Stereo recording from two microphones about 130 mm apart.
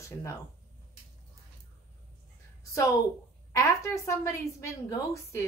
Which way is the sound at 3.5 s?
25° left (ahead or behind).